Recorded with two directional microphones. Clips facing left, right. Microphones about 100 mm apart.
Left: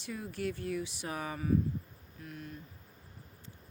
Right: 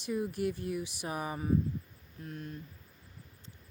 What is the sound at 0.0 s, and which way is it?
Speech, 15° right (ahead or behind).